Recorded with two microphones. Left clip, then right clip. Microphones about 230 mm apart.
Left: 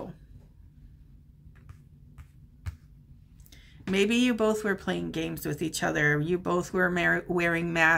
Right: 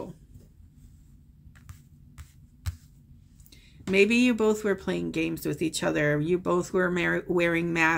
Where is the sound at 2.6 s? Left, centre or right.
Right.